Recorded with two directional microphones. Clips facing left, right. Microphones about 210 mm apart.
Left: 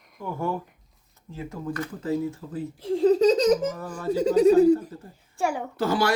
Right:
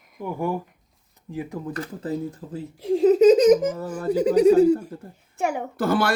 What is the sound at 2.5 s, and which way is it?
Speech, 15° right (ahead or behind).